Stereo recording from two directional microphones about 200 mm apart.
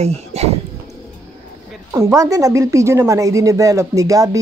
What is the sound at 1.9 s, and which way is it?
A woman's voice, 15° right (ahead or behind).